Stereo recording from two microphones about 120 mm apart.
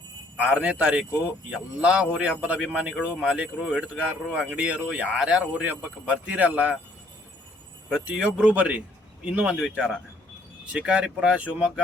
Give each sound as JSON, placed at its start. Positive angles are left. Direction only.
{"t": 0.3, "sound": "a man's voice", "side_deg": -10}
{"t": 7.9, "sound": "a man's voice", "side_deg": -5}